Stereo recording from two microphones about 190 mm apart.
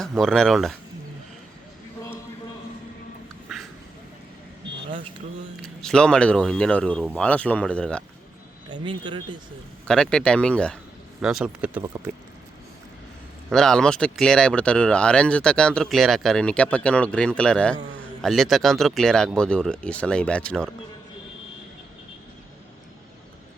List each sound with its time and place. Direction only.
0.0 s speech: centre (ahead or behind)
5.6 s speech: 5° left (ahead or behind)
8.7 s speech: 25° right (ahead or behind)
9.8 s speech: 5° left (ahead or behind)
13.5 s speech: 5° left (ahead or behind)